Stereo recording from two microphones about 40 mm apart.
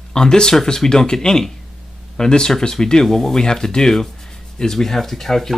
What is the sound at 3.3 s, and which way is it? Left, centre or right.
Speech, centre.